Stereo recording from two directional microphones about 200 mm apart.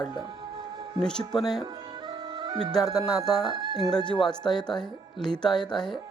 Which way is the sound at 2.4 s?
20° right (ahead or behind).